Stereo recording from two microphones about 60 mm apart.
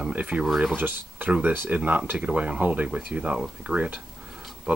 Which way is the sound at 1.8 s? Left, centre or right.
Right.